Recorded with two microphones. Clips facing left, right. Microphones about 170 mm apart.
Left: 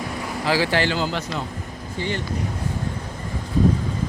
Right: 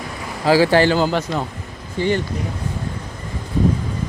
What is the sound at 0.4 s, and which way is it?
Speech, 40° right (ahead or behind).